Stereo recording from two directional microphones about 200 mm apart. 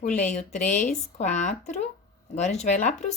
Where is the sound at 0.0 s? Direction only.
35° left (ahead or behind).